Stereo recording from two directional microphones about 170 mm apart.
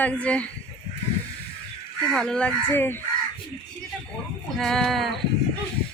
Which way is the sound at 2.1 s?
5° left (ahead or behind).